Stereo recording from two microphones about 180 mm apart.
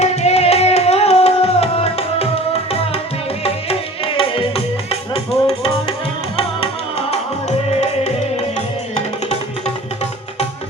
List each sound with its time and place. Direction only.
0.0 s music: 35° left (ahead or behind)
7.7 s music: 35° left (ahead or behind)